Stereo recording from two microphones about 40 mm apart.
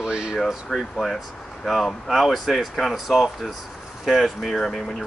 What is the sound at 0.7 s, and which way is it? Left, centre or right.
Speech, centre.